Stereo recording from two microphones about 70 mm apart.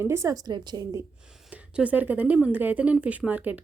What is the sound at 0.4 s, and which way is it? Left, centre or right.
Speech, right.